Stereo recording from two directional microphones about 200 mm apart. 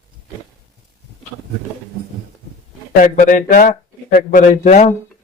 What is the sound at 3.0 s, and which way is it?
A man's voice, 40° left (ahead or behind).